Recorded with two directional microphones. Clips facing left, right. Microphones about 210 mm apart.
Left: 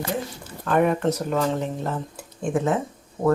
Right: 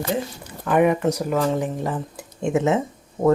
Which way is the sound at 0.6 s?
10° right (ahead or behind).